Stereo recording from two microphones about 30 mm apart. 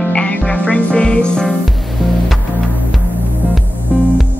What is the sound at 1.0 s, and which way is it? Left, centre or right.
Speech, left.